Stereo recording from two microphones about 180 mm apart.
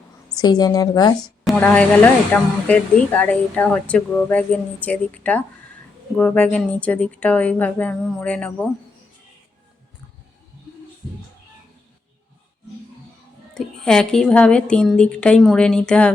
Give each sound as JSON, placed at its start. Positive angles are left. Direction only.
{"t": 0.3, "sound": "a woman's voice", "side_deg": 20}
{"t": 1.5, "sound": "speech", "side_deg": 10}
{"t": 13.5, "sound": "a woman's voice", "side_deg": 5}